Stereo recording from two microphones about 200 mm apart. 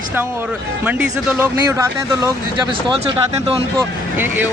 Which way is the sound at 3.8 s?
10° right (ahead or behind).